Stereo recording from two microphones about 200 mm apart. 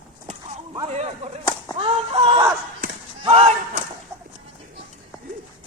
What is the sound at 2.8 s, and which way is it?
Basketball bounce, 30° right (ahead or behind).